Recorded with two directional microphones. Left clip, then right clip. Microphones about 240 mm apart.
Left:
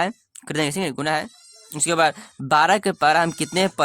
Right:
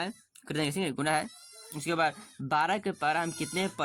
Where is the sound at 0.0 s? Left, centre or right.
Left.